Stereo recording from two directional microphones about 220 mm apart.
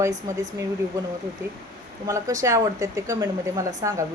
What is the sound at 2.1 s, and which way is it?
Speech, 15° right (ahead or behind).